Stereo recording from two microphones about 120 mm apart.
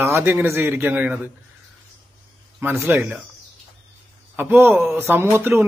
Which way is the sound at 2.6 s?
20° right (ahead or behind).